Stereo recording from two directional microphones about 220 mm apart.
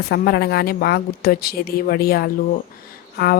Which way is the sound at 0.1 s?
45° left (ahead or behind).